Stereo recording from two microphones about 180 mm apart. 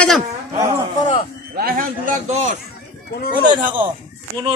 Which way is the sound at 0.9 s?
30° left (ahead or behind).